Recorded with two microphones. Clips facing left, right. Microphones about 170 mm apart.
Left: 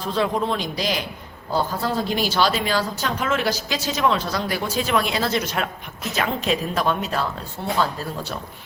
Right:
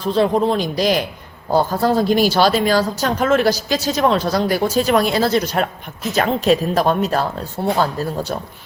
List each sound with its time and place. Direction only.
0.1 s a woman's voice: 35° right (ahead or behind)